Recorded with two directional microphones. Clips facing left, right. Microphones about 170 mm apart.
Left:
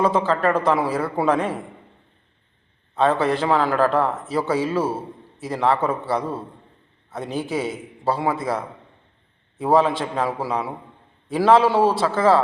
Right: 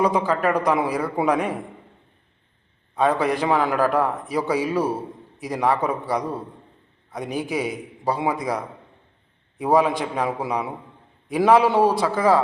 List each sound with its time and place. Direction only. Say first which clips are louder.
0.0 s a man's voice: left 1 dB; 15° right (ahead or behind)
2.9 s a man's voice: left 1 dB; 15° right (ahead or behind)